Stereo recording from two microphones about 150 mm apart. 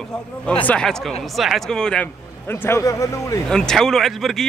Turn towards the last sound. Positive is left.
turn(degrees=0)  # may be behind; listen again after turning